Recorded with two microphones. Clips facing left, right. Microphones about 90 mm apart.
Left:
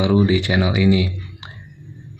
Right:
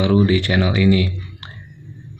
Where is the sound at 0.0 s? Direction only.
15° left (ahead or behind).